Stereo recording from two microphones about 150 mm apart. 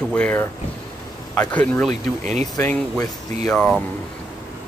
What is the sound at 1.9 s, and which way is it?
Speech, 50° right (ahead or behind).